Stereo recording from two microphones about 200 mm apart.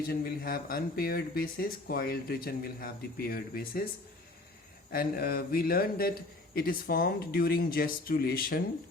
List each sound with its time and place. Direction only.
0.1 s speech: 50° left (ahead or behind)
4.9 s speech: 50° left (ahead or behind)